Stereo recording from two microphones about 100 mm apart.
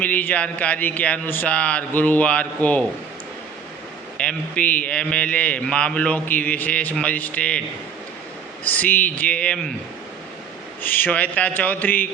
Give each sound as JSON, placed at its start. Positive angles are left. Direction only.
{"t": 0.0, "sound": "a man's voice", "side_deg": 15}
{"t": 4.2, "sound": "a man's voice", "side_deg": 10}
{"t": 8.6, "sound": "a man's voice", "side_deg": 15}
{"t": 10.8, "sound": "a man's voice", "side_deg": 20}